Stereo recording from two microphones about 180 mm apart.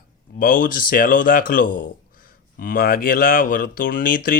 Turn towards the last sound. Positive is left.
turn(degrees=50)  # may be behind; listen again after turning